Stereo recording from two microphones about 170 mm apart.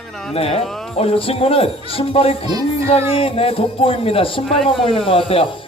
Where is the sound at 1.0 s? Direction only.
35° left (ahead or behind).